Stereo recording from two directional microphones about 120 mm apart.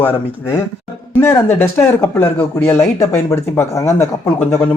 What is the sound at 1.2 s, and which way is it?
A man's voice, 20° left (ahead or behind).